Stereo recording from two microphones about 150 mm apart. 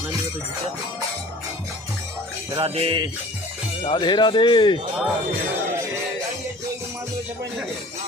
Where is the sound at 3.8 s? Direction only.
35° left (ahead or behind).